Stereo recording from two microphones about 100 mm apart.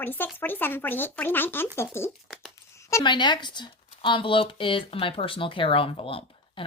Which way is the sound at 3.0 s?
50° left (ahead or behind).